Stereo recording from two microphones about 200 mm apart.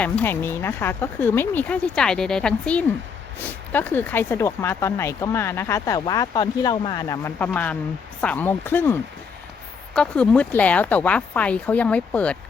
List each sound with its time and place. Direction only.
0.0 s speech: 10° left (ahead or behind)